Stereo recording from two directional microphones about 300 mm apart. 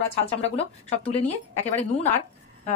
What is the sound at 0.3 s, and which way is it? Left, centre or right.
Speech, left.